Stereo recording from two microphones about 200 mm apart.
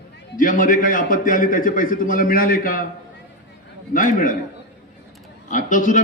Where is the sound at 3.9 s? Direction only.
40° left (ahead or behind).